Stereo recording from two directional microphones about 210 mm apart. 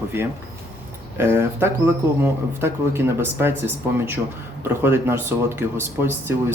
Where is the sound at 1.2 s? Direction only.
10° right (ahead or behind).